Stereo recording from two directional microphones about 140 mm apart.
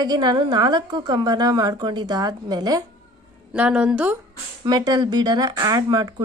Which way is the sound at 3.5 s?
10° right (ahead or behind).